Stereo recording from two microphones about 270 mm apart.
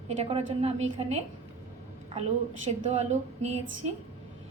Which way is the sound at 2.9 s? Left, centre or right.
Right.